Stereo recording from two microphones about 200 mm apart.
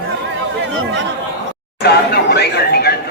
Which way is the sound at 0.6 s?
70° right (ahead or behind).